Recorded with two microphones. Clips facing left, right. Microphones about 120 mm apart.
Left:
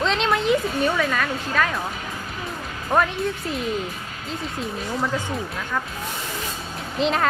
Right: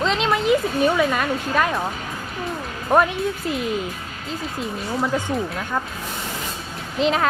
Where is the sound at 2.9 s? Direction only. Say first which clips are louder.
Right 3 dB; 15° right (ahead or behind).